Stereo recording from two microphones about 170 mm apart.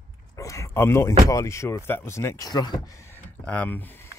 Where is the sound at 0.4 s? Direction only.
20° left (ahead or behind).